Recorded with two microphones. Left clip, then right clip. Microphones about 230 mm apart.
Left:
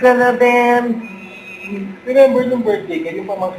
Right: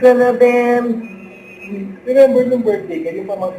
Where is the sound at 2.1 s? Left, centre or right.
Left.